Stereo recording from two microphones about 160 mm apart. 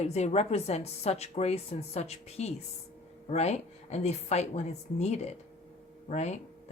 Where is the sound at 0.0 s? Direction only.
45° left (ahead or behind).